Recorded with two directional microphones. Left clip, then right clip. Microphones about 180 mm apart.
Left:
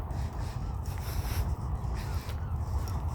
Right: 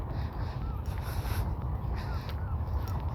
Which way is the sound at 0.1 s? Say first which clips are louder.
Right 1 dB; 55° left (ahead or behind).